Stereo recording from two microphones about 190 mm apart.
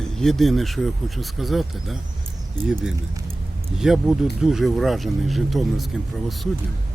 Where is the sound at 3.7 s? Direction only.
Centre (ahead or behind).